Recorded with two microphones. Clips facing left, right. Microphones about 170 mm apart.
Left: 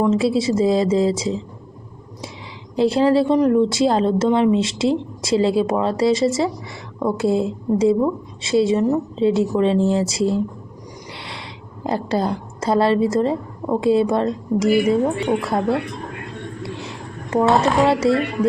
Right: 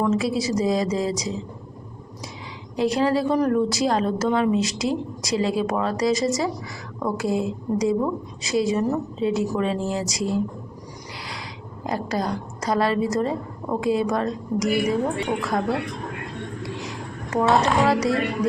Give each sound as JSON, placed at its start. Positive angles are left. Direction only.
{"t": 0.0, "sound": "a woman's voice", "side_deg": 25}
{"t": 2.7, "sound": "a woman's voice", "side_deg": 30}
{"t": 11.8, "sound": "a woman's voice", "side_deg": 30}
{"t": 16.6, "sound": "a sound", "side_deg": 30}